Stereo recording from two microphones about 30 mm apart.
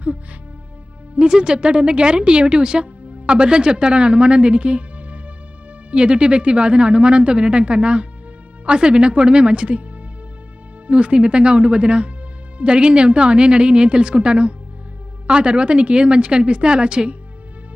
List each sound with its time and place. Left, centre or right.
1.3 s speech: right
10.8 s speech: right